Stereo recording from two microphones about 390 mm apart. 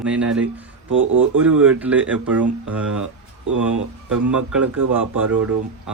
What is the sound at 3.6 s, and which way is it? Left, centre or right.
Speech, centre.